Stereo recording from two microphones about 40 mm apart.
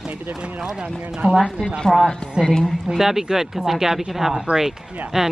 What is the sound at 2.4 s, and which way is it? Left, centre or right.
Speech, centre.